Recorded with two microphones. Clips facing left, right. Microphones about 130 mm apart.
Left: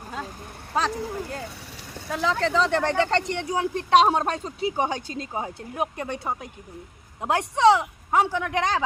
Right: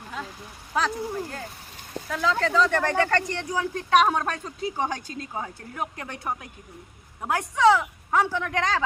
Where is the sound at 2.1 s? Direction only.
20° left (ahead or behind).